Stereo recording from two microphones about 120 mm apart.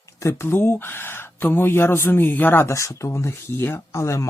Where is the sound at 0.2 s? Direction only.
20° left (ahead or behind).